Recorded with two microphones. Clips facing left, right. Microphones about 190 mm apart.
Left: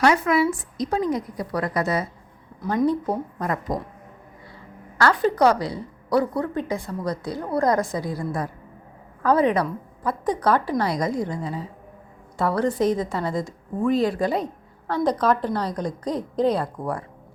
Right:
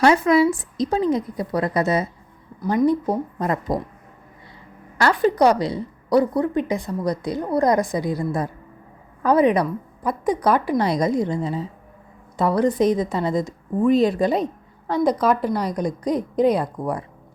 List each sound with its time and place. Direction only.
0.0 s a woman's voice: 30° right (ahead or behind)
4.9 s a woman's voice: 15° right (ahead or behind)